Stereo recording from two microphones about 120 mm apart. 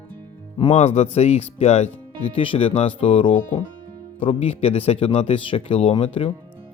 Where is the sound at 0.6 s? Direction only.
65° left (ahead or behind).